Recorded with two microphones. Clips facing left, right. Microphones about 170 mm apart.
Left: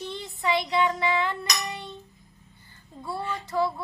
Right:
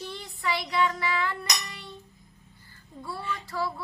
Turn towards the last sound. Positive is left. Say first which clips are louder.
# left 5 dB
turn(degrees=20)  # may be behind; listen again after turning